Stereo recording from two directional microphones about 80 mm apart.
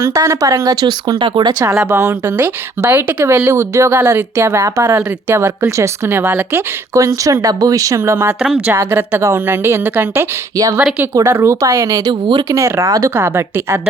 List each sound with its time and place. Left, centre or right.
0.0 s speech: right
0.8 s speech: right
1.9 s a woman's voice: right
3.2 s a woman's voice: right
6.9 s a woman's voice: right
11.1 s a woman's voice: right